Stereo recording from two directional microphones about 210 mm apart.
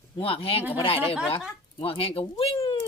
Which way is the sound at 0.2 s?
25° left (ahead or behind).